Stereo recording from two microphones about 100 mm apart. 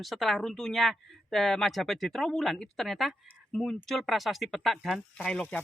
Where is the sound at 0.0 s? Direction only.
Centre (ahead or behind).